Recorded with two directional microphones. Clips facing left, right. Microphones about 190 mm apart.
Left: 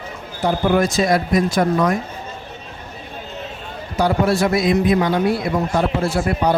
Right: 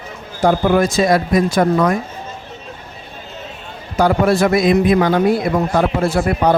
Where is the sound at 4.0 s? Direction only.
50° right (ahead or behind).